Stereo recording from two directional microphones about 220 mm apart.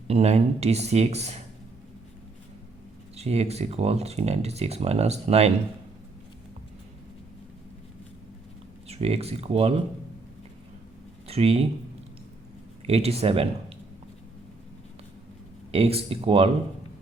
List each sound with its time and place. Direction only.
0.1 s speech: 30° right (ahead or behind)
3.2 s speech: 30° right (ahead or behind)
8.9 s speech: 30° right (ahead or behind)
11.3 s speech: 25° right (ahead or behind)
12.8 s speech: 25° right (ahead or behind)
15.7 s speech: 25° right (ahead or behind)